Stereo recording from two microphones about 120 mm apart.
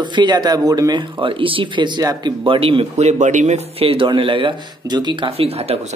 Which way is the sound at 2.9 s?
85° right.